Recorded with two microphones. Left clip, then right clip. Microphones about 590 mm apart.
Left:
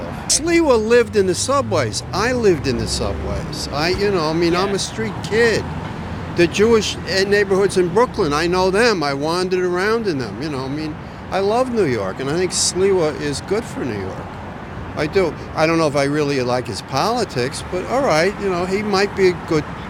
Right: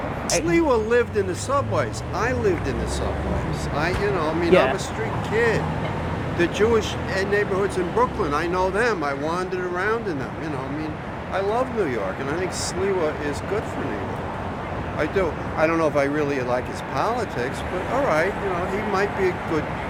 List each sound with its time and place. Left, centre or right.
0.3 s speech: left
3.8 s speech: left
5.3 s speech: left
6.3 s speech: left
11.3 s speech: left
14.9 s speech: left